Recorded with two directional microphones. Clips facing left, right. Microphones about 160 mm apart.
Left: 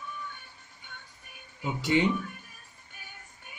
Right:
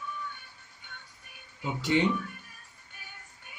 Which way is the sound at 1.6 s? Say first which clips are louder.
Left 1 dB; 10° left (ahead or behind).